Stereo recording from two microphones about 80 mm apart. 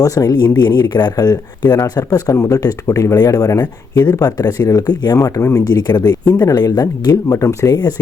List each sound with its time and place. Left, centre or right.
0.0 s speech: left
0.3 s speech: left
5.1 s speech: left
5.6 s speech: left